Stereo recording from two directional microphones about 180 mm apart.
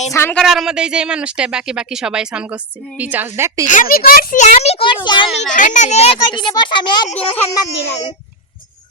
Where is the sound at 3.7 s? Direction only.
50° left (ahead or behind).